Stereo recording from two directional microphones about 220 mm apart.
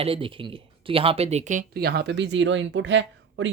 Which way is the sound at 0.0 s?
25° right (ahead or behind).